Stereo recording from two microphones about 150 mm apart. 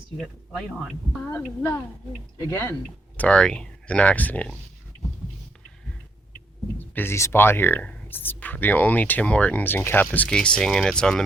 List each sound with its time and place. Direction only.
0.2 s speech: 5° right (ahead or behind)
1.5 s speech: 15° left (ahead or behind)
3.2 s speech: 5° left (ahead or behind)
6.7 s speech: 15° left (ahead or behind)